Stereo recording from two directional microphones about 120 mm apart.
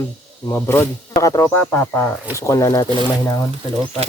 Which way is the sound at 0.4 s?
20° left (ahead or behind).